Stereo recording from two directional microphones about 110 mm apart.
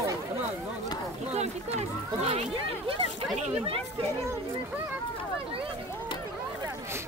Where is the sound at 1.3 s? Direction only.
90° right; by 2.9 s 75° right (ahead or behind).